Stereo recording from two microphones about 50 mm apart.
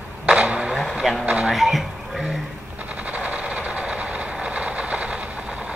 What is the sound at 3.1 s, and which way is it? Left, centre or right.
Vehicle, right.